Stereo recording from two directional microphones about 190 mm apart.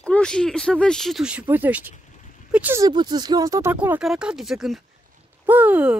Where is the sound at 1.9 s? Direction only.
40° left (ahead or behind).